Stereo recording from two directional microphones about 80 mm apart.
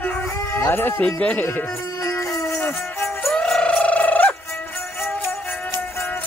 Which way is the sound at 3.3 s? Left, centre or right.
Centre.